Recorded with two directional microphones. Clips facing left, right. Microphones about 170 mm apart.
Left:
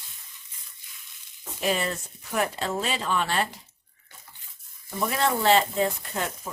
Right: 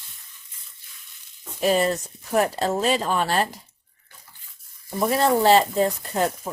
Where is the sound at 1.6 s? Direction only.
40° right (ahead or behind).